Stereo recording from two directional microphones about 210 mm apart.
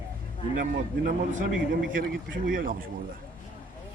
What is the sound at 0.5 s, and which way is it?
Speech, 45° right (ahead or behind).